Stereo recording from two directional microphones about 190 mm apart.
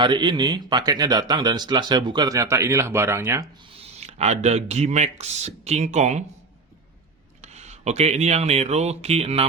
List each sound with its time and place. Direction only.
0.0 s speech: 25° right (ahead or behind)
4.0 s speech: 35° right (ahead or behind)
7.4 s speech: 35° right (ahead or behind)